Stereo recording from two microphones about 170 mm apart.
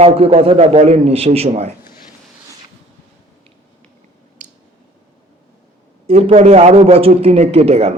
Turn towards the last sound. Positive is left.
turn(degrees=-40)  # may be behind; listen again after turning